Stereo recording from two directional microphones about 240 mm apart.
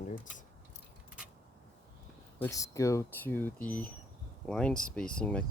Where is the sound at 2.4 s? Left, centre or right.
Centre.